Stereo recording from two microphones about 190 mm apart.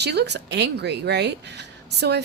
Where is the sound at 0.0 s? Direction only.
60° right (ahead or behind).